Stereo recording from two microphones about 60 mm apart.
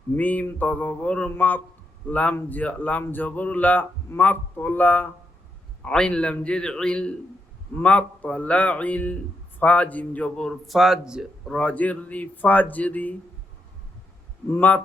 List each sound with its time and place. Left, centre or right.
0.2 s speech: left
5.8 s a man's voice: centre
10.5 s speech: centre
11.5 s speech: left
14.5 s speech: left